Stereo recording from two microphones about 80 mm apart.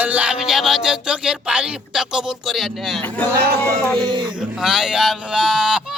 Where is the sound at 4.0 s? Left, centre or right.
Right.